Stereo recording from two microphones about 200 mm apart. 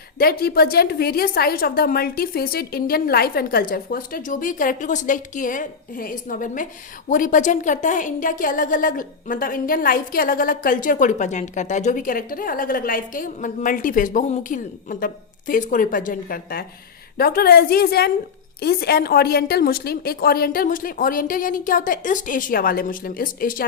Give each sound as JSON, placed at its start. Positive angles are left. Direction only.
{"t": 0.2, "sound": "a woman's voice", "side_deg": 50}